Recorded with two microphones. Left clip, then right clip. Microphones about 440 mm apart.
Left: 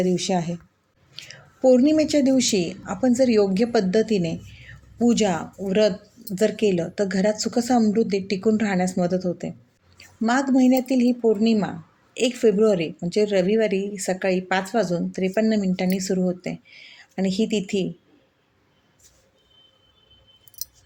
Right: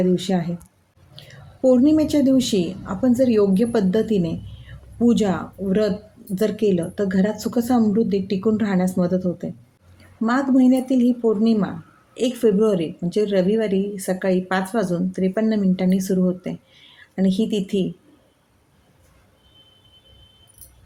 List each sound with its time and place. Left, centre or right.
0.0 s speech: right